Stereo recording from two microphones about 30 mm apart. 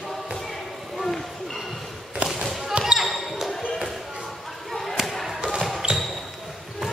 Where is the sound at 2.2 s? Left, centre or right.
Right.